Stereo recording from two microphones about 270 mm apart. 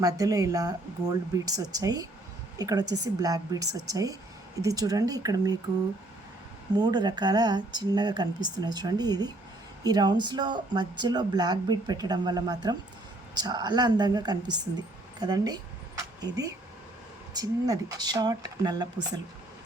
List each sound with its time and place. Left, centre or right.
0.0 s speech: centre
6.7 s speech: centre